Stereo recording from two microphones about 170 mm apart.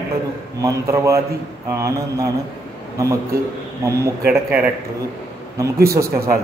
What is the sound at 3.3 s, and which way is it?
Speech, 60° right (ahead or behind).